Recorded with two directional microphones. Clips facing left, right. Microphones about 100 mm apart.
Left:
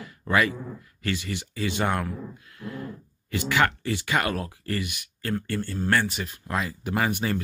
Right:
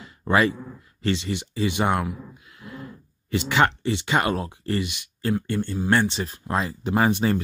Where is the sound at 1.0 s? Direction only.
25° right (ahead or behind).